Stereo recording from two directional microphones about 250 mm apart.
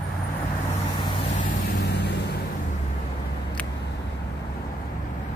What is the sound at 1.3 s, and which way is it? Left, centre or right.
Vehicle, left.